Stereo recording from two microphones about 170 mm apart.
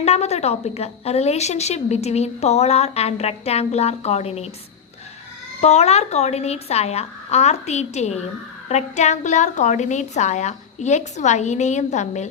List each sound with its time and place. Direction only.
0.0 s a woman's voice: 40° left (ahead or behind)
5.5 s a woman's voice: 40° left (ahead or behind)